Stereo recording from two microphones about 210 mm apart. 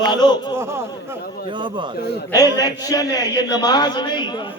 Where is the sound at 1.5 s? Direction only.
25° right (ahead or behind).